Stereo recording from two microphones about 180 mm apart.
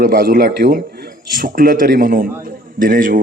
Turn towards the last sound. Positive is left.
turn(degrees=-50)  # may be behind; listen again after turning